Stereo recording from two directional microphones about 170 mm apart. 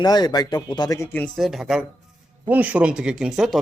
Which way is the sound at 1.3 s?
Centre (ahead or behind).